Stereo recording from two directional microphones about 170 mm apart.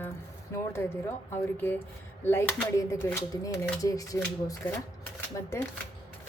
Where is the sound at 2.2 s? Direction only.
15° left (ahead or behind).